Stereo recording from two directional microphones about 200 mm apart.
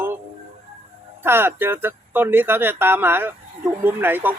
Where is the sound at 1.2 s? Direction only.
10° right (ahead or behind).